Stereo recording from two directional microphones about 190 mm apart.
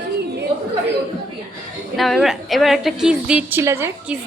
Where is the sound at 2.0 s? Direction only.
Centre (ahead or behind).